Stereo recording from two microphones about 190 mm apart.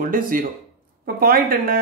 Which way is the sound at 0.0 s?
45° right (ahead or behind).